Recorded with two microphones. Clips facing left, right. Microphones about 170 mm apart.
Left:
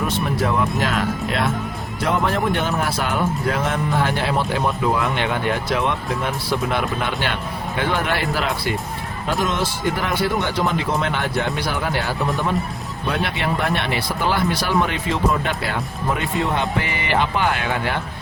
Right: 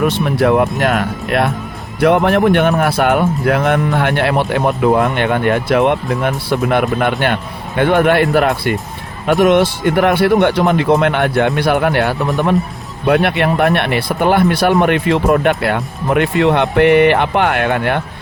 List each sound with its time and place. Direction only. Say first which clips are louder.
0.0 s speech: right 8 dB; 70° right (ahead or behind)